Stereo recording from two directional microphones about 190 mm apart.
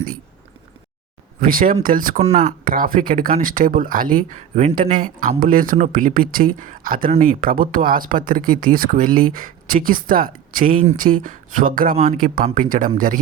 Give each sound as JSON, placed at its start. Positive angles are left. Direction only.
{"t": 1.4, "sound": "speech", "side_deg": -50}
{"t": 2.1, "sound": "speech", "side_deg": -35}
{"t": 2.6, "sound": "speech", "side_deg": -50}